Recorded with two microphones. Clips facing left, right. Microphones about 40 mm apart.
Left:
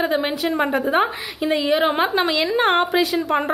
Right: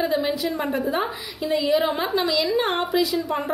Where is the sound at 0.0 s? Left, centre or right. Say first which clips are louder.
Left 2 dB; left.